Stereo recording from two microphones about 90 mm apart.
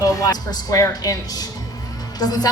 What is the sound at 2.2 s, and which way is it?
Speech, 45° left (ahead or behind).